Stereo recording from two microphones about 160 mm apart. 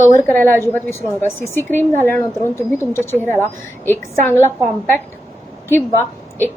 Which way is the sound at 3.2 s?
15° left (ahead or behind).